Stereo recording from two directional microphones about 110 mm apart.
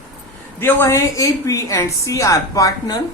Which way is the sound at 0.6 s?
25° left (ahead or behind).